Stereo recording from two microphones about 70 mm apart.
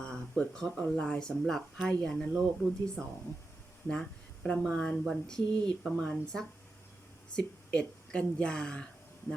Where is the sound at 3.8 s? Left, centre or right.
Centre.